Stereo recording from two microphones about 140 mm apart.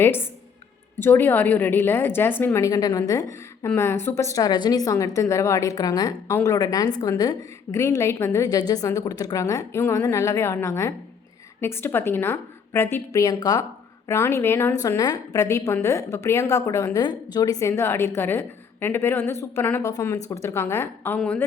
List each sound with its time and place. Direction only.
0.9 s a woman's voice: 15° left (ahead or behind)